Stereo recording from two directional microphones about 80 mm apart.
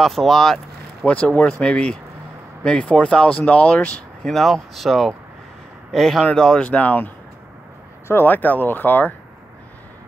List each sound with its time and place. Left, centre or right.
0.0 s speech: centre
1.0 s speech: centre
4.3 s speech: centre
8.1 s speech: left